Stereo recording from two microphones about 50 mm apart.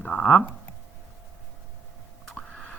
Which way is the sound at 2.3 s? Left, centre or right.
Centre.